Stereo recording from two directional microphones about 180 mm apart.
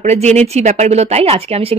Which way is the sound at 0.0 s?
40° right (ahead or behind).